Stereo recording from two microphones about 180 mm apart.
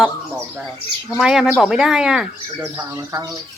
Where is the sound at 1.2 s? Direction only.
5° right (ahead or behind).